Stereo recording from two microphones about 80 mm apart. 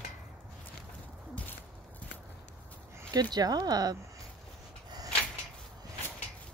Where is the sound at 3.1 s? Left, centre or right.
Right.